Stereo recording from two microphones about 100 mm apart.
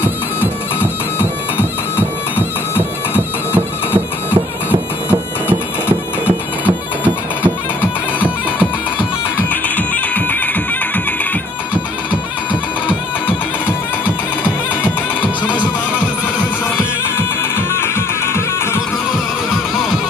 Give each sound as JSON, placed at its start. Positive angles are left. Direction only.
{"t": 2.8, "sound": "music", "side_deg": -20}
{"t": 5.5, "sound": "music", "side_deg": -15}
{"t": 9.5, "sound": "music", "side_deg": 15}
{"t": 17.7, "sound": "music", "side_deg": 25}